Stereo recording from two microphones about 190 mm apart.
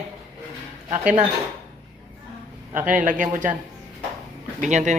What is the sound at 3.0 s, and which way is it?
Speech, 45° right (ahead or behind).